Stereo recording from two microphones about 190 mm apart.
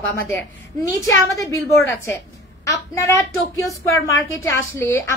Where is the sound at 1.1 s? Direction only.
15° left (ahead or behind).